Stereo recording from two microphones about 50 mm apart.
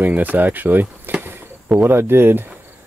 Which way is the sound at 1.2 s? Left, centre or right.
Right.